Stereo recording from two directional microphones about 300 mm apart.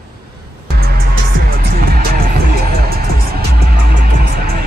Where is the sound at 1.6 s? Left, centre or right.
Right.